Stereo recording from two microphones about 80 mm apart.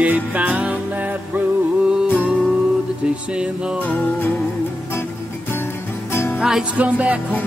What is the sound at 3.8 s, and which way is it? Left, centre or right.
Music, left.